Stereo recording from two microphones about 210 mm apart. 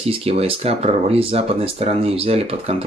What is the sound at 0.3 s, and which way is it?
Speech, 30° right (ahead or behind).